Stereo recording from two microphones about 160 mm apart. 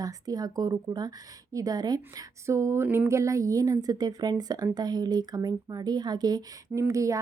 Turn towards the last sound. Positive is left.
turn(degrees=-20)  # may be behind; listen again after turning